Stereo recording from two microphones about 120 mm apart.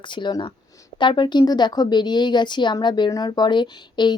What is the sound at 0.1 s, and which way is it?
Speech, 40° left (ahead or behind).